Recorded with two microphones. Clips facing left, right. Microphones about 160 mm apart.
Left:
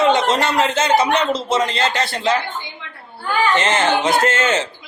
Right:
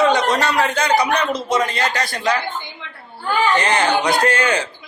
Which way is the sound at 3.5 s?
20° left (ahead or behind).